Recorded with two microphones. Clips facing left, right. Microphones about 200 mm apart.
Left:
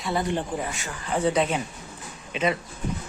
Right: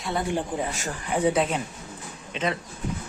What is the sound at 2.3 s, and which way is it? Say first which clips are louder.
Speech: left 3 dB; 5° left (ahead or behind).